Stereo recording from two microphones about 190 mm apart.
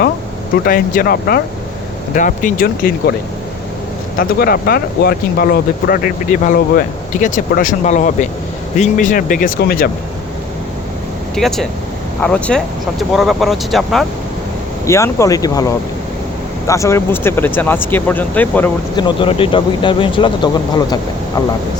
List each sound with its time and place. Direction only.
0.6 s speech: 50° left (ahead or behind)
2.1 s speech: 40° left (ahead or behind)
4.2 s speech: 55° left (ahead or behind)
11.3 s speech: centre (ahead or behind)
14.8 s speech: 15° left (ahead or behind)
18.9 s speech: 25° left (ahead or behind)